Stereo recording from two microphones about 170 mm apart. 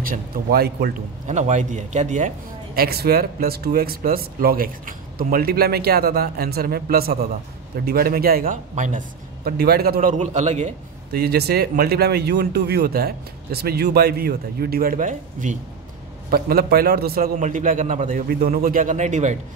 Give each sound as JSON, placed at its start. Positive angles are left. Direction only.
{"t": 0.0, "sound": "speech", "side_deg": -60}
{"t": 1.3, "sound": "a man's voice", "side_deg": -45}
{"t": 2.7, "sound": "speech", "side_deg": -65}
{"t": 11.1, "sound": "speech", "side_deg": -70}
{"t": 16.3, "sound": "a man's voice", "side_deg": -60}